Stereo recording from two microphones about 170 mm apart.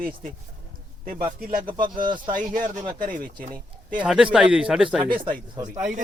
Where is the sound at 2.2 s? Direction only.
50° right (ahead or behind).